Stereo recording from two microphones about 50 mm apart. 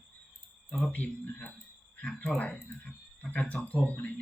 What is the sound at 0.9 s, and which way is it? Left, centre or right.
Speech, left.